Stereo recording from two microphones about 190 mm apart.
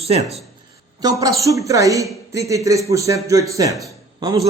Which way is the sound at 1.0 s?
20° right (ahead or behind).